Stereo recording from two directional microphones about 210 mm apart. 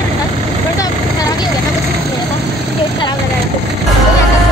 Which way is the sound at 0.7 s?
15° left (ahead or behind).